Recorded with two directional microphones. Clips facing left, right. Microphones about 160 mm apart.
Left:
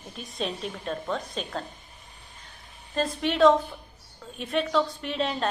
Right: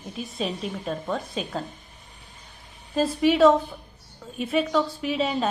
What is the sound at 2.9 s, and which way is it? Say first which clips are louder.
A woman's voice: right 6 dB; 5° right (ahead or behind).